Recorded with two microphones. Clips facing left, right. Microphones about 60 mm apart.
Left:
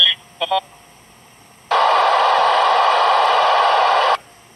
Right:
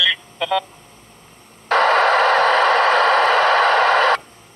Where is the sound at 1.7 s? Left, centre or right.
Right.